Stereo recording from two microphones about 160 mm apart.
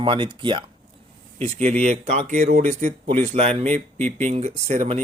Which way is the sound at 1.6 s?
10° left (ahead or behind).